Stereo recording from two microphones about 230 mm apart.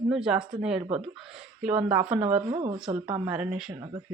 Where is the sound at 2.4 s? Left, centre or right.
Right.